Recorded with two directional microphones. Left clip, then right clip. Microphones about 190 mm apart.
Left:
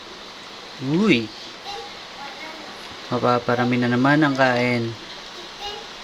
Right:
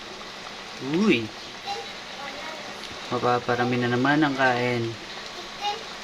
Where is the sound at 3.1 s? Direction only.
20° left (ahead or behind).